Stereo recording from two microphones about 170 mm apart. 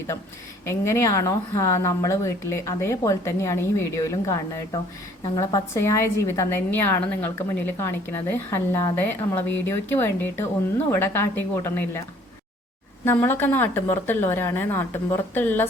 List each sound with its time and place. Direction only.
0.6 s a woman's voice: 15° left (ahead or behind)
13.1 s a woman's voice: 10° left (ahead or behind)